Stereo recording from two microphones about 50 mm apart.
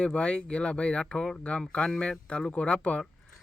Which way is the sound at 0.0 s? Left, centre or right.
Left.